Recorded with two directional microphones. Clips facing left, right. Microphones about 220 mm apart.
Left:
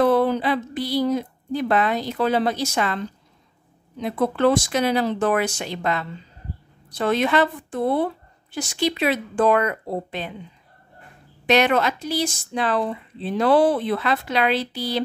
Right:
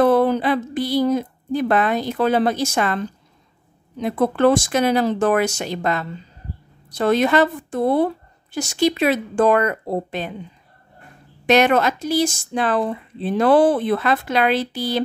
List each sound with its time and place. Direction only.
0.0 s a woman's voice: 50° right (ahead or behind)
11.4 s speech: 45° right (ahead or behind)